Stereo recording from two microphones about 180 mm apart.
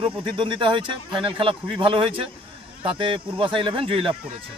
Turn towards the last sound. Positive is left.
turn(degrees=-30)  # may be behind; listen again after turning